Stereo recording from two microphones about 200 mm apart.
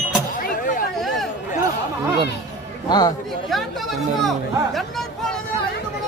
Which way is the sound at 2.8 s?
20° left (ahead or behind).